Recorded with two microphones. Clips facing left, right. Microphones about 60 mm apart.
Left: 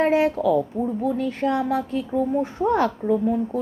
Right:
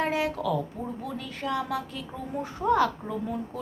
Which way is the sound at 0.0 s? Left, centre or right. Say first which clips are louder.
Left 8 dB; left.